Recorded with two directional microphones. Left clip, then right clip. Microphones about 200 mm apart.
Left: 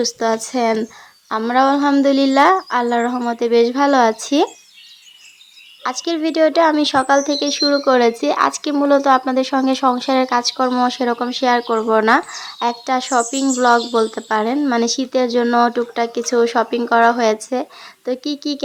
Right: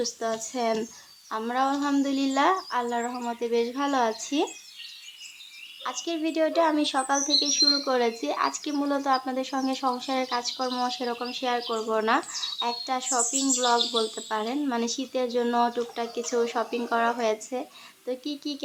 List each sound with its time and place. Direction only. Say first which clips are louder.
0.0 s speech: left 11 dB; 40° left (ahead or behind)
5.8 s speech: left 10 dB; 40° left (ahead or behind)